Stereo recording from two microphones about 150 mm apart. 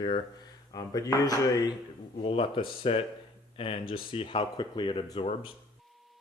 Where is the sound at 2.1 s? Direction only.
40° left (ahead or behind).